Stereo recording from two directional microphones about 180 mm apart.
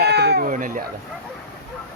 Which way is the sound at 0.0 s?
65° right (ahead or behind).